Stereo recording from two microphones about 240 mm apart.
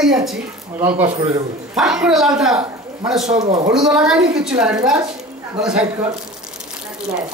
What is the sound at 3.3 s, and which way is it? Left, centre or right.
Speech, right.